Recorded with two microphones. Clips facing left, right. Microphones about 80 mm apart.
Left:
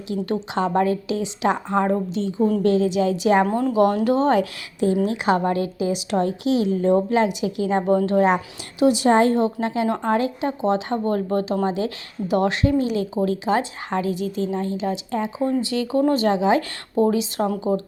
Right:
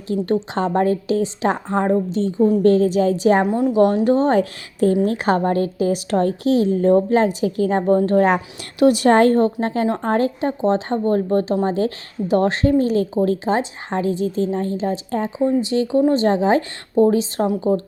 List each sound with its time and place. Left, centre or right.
0.1 s a woman's voice: right
3.4 s speech: centre
3.9 s a woman's voice: right
8.8 s a woman's voice: right
15.4 s a woman's voice: right